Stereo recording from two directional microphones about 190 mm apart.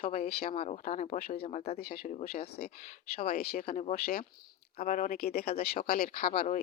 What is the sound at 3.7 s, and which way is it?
A woman's voice, 40° left (ahead or behind).